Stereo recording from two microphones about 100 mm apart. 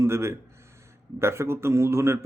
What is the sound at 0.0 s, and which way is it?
Speech, 25° right (ahead or behind).